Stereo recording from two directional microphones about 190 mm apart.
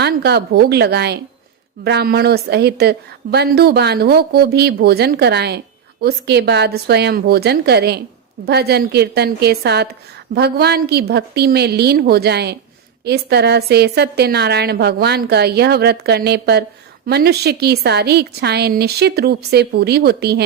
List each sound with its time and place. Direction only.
0.0 s a woman's voice: 60° right (ahead or behind)